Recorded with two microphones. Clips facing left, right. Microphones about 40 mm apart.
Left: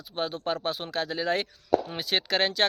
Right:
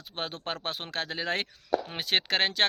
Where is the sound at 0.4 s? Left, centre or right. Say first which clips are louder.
Left 5 dB; right.